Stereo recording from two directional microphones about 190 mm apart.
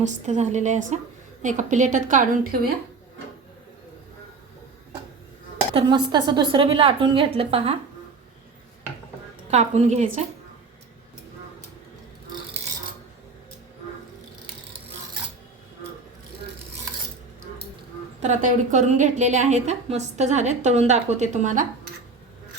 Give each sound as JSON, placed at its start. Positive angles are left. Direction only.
{"t": 0.0, "sound": "a woman's voice", "side_deg": -40}
{"t": 5.7, "sound": "a woman's voice", "side_deg": -25}
{"t": 9.5, "sound": "a woman's voice", "side_deg": -35}
{"t": 18.2, "sound": "a woman's voice", "side_deg": -40}